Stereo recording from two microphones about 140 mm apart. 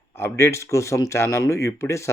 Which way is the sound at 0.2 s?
20° left (ahead or behind).